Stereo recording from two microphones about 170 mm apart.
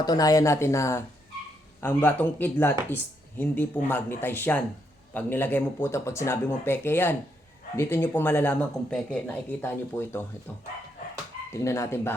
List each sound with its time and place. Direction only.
0.0 s speech: 20° left (ahead or behind)
11.5 s speech: 15° left (ahead or behind)